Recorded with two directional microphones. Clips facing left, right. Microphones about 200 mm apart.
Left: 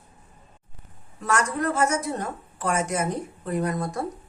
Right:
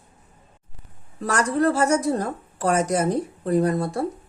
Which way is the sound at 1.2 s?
35° right (ahead or behind).